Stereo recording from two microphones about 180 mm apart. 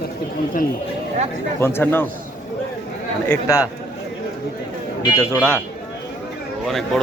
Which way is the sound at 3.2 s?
15° left (ahead or behind).